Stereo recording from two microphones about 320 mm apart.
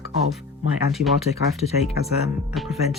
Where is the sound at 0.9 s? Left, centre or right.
Centre.